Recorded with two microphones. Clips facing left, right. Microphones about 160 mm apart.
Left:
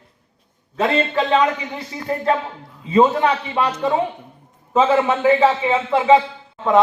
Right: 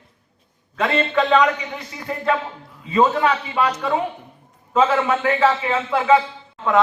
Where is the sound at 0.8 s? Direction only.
30° left (ahead or behind).